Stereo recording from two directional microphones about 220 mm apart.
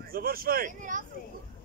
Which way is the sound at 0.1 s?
40° right (ahead or behind).